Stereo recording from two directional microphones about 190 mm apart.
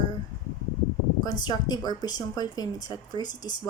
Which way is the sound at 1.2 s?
20° left (ahead or behind).